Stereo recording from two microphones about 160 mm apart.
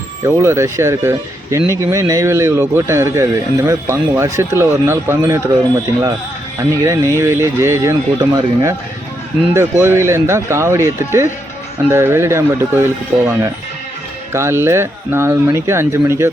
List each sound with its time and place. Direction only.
0.3 s speech: 15° right (ahead or behind)
6.6 s speech: 20° right (ahead or behind)